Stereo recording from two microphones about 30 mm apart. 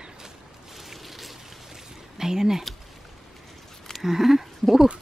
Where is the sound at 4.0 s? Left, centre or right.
Centre.